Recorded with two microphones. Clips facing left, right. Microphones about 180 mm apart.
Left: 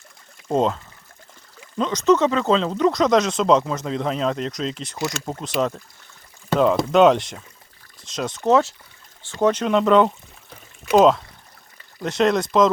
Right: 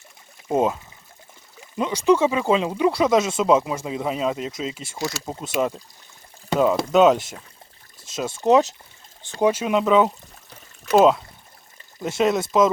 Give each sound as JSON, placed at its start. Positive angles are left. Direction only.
{"t": 0.4, "sound": "speech", "side_deg": -10}
{"t": 8.4, "sound": "speech", "side_deg": -15}
{"t": 11.9, "sound": "speech", "side_deg": -5}